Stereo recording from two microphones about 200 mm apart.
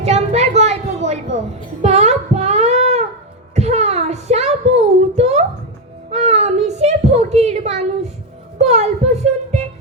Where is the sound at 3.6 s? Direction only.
35° right (ahead or behind).